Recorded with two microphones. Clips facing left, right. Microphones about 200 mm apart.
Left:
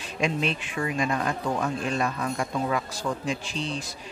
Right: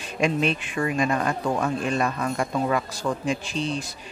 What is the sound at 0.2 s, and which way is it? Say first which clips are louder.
Speech: right 4 dB; 55° right (ahead or behind).